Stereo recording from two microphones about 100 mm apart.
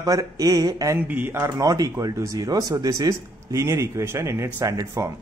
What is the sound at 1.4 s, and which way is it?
A man's voice, 35° right (ahead or behind).